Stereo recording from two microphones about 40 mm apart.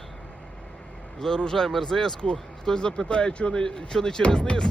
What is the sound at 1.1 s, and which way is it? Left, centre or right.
Speech, centre.